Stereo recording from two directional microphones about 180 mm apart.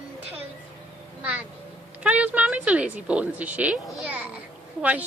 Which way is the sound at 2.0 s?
10° right (ahead or behind).